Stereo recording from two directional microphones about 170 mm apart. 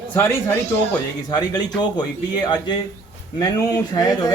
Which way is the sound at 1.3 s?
25° left (ahead or behind).